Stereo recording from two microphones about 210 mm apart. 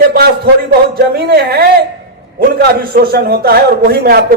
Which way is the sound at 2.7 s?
45° right (ahead or behind).